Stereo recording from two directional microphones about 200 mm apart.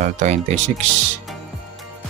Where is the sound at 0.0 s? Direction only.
40° right (ahead or behind).